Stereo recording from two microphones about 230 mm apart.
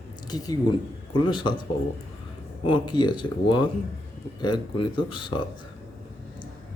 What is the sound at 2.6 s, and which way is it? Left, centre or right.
Speech, centre.